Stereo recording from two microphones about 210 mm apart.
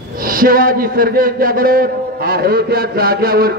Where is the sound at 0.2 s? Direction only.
45° right (ahead or behind).